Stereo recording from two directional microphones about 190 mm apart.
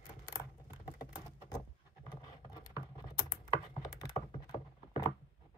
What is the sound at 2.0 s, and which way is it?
Computer keyboard, 20° left (ahead or behind).